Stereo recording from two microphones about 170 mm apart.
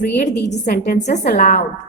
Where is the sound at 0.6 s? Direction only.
60° left (ahead or behind).